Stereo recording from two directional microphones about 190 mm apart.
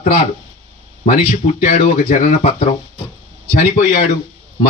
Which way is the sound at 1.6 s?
45° left (ahead or behind).